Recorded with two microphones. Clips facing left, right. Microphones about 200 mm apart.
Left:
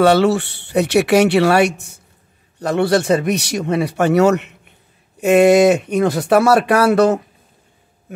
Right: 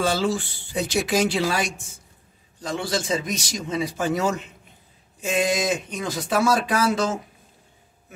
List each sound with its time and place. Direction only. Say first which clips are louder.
0.0 s a man's voice: left 10 dB; 70° left (ahead or behind)